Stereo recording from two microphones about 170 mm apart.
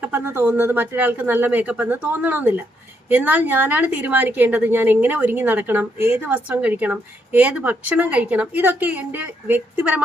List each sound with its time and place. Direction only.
0.0 s a woman's voice: 10° right (ahead or behind)